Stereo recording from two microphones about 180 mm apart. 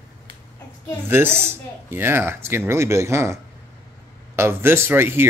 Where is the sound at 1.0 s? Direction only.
10° right (ahead or behind).